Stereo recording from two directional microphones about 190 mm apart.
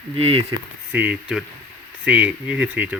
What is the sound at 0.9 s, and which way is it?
Speech, 10° right (ahead or behind).